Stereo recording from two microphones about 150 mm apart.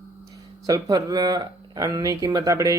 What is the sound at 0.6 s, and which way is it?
Speech, 25° right (ahead or behind).